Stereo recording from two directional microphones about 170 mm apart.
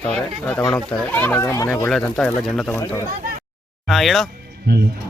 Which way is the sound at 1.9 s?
Centre (ahead or behind).